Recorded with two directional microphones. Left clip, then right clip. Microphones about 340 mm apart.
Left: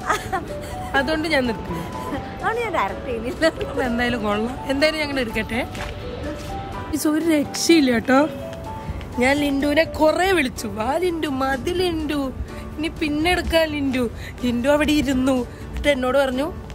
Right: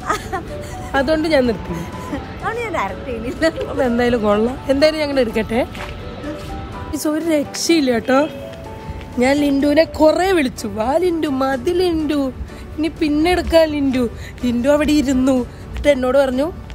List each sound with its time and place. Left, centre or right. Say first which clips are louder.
0.0 s music: right 1 dB; centre
0.9 s speech: right 5 dB; centre
2.4 s a woman's voice: even; centre
3.5 s speech: right 5 dB; centre
6.9 s speech: right 2 dB; centre
9.8 s speech: right 4 dB; centre